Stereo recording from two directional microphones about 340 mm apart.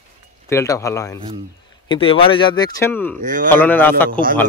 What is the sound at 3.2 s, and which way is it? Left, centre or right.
Speech, right.